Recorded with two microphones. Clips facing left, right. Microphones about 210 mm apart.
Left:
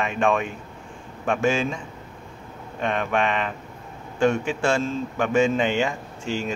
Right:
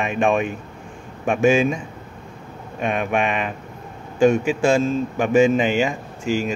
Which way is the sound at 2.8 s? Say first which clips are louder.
Right 2 dB; 15° right (ahead or behind).